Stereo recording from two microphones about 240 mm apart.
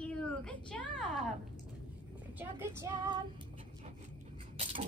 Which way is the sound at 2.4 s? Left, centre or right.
Centre.